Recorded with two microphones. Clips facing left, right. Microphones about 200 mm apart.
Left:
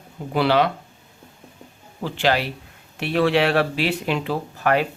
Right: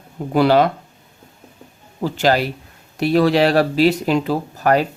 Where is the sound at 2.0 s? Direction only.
40° right (ahead or behind).